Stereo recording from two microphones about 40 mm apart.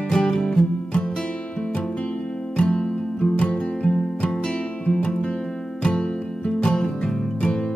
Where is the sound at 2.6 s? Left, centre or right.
Left.